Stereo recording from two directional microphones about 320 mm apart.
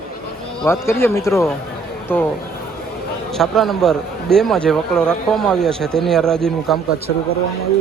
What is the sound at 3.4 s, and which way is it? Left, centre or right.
A man's voice, centre.